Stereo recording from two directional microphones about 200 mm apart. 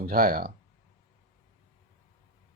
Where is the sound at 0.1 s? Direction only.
45° right (ahead or behind).